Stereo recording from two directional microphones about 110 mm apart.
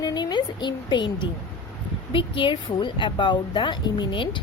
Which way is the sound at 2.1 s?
50° left (ahead or behind).